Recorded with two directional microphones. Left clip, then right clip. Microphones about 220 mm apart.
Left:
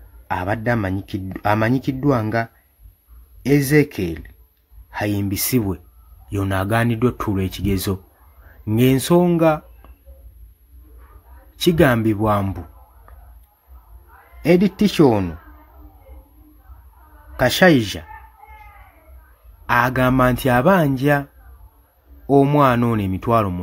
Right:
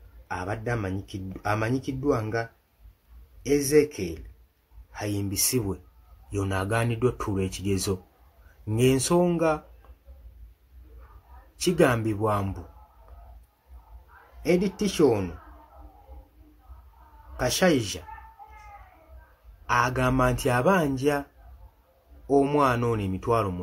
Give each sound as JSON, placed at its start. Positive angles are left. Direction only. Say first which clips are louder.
{"t": 0.3, "sound": "speech", "louder": "left 9 dB", "side_deg": 50}
{"t": 11.6, "sound": "speech", "louder": "left 7 dB", "side_deg": 40}
{"t": 14.4, "sound": "speech", "louder": "left 8 dB", "side_deg": 45}
{"t": 17.4, "sound": "speech", "louder": "left 9 dB", "side_deg": 45}
{"t": 19.6, "sound": "speech", "louder": "left 7 dB", "side_deg": 40}